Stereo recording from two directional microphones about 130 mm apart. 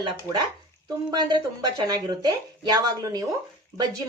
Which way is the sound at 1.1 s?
30° right (ahead or behind).